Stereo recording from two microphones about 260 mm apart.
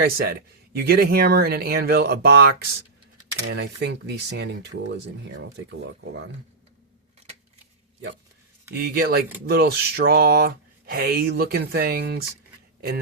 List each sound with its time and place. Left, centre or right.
0.0 s speech: right
8.8 s speech: right